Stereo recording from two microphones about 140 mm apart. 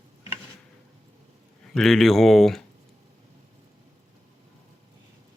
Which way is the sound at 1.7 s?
5° left (ahead or behind).